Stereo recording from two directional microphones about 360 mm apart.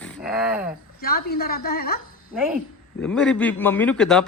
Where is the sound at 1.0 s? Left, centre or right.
Left.